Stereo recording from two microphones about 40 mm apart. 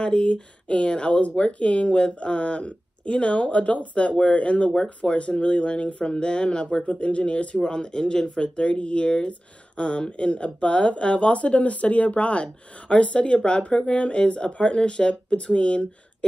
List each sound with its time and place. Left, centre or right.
0.0 s speech: left